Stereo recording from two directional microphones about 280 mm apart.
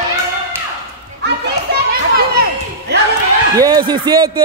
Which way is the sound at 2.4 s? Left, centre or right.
Right.